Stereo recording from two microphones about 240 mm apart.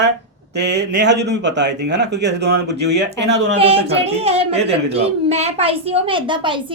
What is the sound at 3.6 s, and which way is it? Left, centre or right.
A woman's voice, right.